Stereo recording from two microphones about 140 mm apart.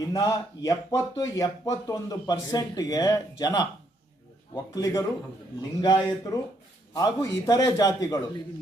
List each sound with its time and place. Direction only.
0.0 s speech: 25° left (ahead or behind)